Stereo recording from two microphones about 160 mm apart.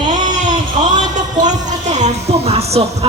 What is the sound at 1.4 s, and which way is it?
Speech, 50° right (ahead or behind).